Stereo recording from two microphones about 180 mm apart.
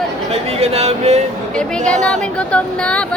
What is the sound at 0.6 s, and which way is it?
Music, 35° right (ahead or behind).